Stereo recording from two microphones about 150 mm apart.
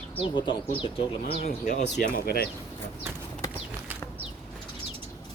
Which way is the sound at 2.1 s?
90° left.